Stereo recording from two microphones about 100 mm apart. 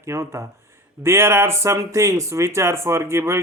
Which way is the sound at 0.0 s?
30° right (ahead or behind).